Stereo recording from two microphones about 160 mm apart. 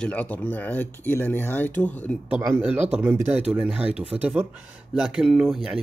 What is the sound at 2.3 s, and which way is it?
Speech, 10° right (ahead or behind).